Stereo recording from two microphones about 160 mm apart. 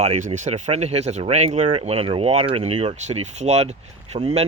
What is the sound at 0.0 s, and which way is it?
Speech, 40° right (ahead or behind).